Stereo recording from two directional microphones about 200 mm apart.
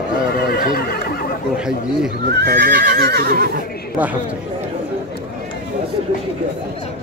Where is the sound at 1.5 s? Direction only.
5° right (ahead or behind).